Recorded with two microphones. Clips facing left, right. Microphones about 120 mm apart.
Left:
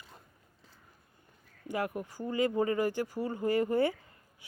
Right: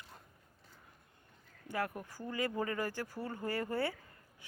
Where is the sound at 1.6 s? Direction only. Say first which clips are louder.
Left 4 dB; 15° left (ahead or behind).